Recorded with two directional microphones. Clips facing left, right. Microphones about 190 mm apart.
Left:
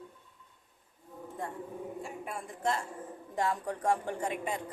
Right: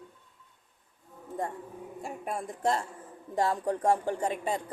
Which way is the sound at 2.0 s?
40° right (ahead or behind).